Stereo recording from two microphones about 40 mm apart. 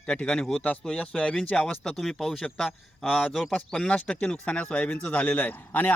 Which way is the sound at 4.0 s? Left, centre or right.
Left.